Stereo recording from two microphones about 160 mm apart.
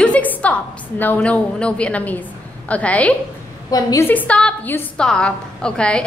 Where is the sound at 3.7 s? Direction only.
20° left (ahead or behind).